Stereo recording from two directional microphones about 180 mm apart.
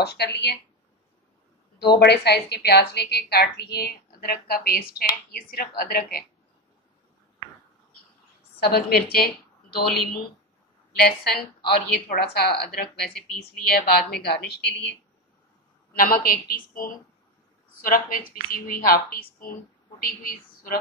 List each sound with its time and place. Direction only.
0.0 s speech: 65° left (ahead or behind)
2.0 s a woman's voice: 65° left (ahead or behind)
8.5 s a woman's voice: 60° left (ahead or behind)
10.9 s a woman's voice: 60° left (ahead or behind)
15.9 s a woman's voice: 50° left (ahead or behind)